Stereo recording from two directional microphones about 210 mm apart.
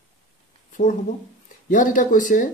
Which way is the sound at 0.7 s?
35° left (ahead or behind).